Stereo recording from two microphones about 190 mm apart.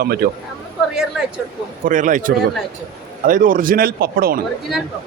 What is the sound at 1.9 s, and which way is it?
A man's voice, 45° right (ahead or behind).